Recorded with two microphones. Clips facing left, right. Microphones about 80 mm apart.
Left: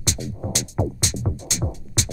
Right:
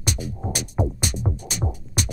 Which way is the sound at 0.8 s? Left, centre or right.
Centre.